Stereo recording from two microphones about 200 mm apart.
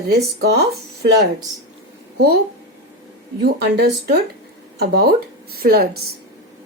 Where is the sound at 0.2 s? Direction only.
55° right (ahead or behind).